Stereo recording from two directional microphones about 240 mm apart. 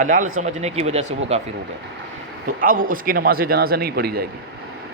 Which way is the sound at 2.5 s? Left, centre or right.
Right.